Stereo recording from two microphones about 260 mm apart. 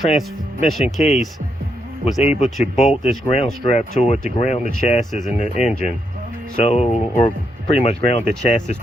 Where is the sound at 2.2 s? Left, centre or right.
Left.